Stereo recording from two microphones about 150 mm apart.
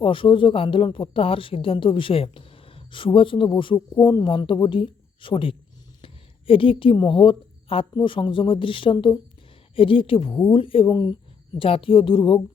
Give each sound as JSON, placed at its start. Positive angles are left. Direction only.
{"t": 0.0, "sound": "a woman's voice", "side_deg": 35}